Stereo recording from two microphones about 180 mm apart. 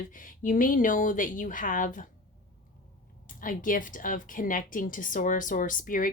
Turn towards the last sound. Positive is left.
turn(degrees=50)  # may be behind; listen again after turning